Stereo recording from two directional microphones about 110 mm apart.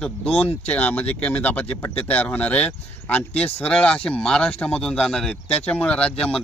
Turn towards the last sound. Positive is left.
turn(degrees=10)  # may be behind; listen again after turning